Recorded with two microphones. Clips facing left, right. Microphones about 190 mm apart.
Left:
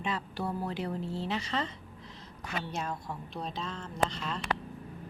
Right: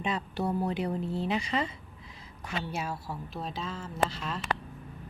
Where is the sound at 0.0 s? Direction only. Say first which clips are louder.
Right 3 dB; 20° right (ahead or behind).